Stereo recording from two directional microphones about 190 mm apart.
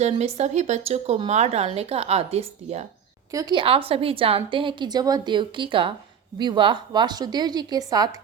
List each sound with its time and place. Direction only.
0.0 s speech: 35° right (ahead or behind)
3.3 s a woman's voice: 20° right (ahead or behind)